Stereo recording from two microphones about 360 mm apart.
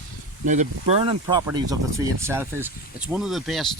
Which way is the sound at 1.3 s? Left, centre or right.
Centre.